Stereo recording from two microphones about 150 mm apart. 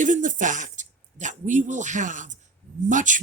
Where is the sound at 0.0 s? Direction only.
60° right (ahead or behind).